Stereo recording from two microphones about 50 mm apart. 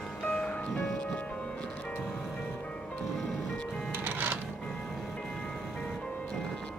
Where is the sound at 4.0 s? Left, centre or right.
Right.